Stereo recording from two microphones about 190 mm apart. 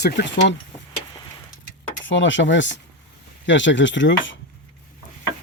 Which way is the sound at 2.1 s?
75° left (ahead or behind).